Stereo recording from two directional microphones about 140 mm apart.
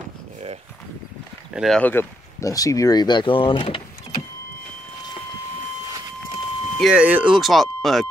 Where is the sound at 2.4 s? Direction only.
25° left (ahead or behind).